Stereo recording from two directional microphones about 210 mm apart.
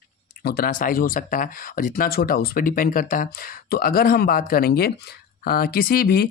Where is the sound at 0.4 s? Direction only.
45° left (ahead or behind).